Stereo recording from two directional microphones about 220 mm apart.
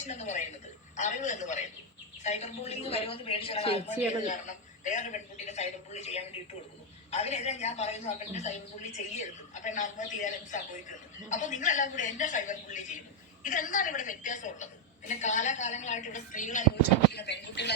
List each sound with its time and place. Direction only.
0.0 s a woman's voice: 35° left (ahead or behind)
17.1 s speech: 50° left (ahead or behind)